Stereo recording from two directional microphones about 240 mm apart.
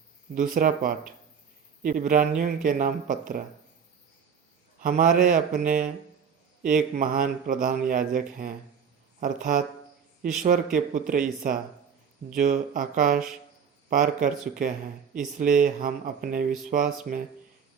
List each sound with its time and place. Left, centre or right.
0.3 s speech: right
4.8 s speech: right
6.9 s speech: right